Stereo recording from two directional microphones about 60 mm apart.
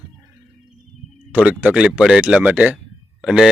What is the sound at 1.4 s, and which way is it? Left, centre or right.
Speech, right.